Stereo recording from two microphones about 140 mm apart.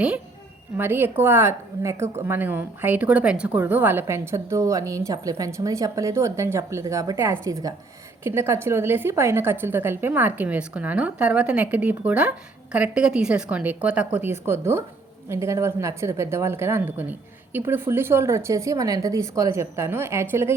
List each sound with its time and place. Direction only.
0.8 s a woman's voice: 15° right (ahead or behind)